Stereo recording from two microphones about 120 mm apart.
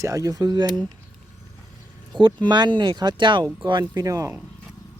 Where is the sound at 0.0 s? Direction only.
30° right (ahead or behind).